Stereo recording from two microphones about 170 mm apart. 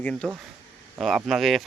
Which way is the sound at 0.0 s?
5° left (ahead or behind).